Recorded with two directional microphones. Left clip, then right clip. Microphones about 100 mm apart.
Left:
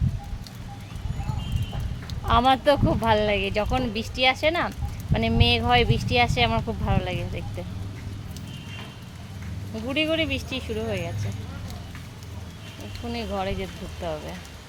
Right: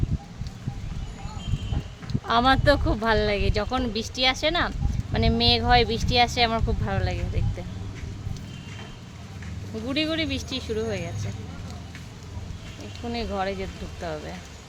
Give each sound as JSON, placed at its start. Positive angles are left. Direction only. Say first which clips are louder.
{"t": 2.2, "sound": "speech", "louder": "left 1 dB", "side_deg": -20}
{"t": 9.8, "sound": "speech", "louder": "left 2 dB", "side_deg": -25}
{"t": 13.1, "sound": "speech", "louder": "right 1 dB", "side_deg": -25}